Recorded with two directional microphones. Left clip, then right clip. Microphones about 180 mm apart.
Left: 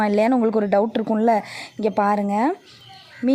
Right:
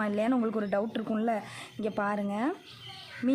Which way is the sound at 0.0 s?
45° left (ahead or behind).